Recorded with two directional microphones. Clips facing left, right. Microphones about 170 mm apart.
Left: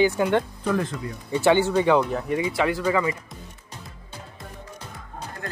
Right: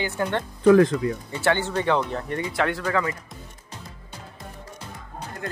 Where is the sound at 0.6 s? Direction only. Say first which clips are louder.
Right 10 dB; 90° right.